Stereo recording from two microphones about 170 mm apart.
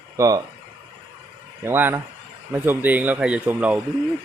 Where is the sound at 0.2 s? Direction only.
20° right (ahead or behind).